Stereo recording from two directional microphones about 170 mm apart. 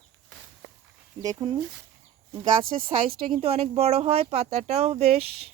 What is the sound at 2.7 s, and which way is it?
Speech, 35° right (ahead or behind).